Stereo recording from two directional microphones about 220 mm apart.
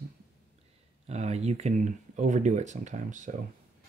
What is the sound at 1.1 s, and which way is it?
Speech, 30° right (ahead or behind).